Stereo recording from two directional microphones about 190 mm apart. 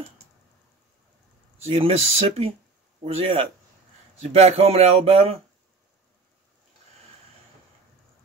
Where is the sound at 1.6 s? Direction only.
30° right (ahead or behind).